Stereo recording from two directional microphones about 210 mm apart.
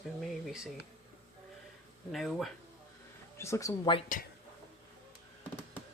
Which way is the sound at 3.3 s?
15° left (ahead or behind).